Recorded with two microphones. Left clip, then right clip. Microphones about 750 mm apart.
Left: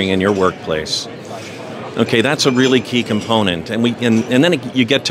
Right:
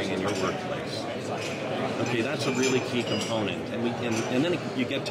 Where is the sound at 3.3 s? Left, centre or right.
Left.